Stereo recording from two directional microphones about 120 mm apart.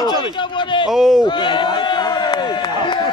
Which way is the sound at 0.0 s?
40° left (ahead or behind).